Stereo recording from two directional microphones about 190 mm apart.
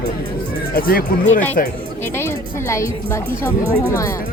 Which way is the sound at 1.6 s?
45° left (ahead or behind).